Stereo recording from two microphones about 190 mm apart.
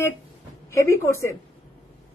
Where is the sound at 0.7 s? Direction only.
15° left (ahead or behind).